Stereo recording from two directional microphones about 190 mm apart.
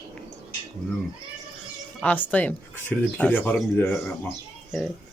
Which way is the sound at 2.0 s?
10° left (ahead or behind).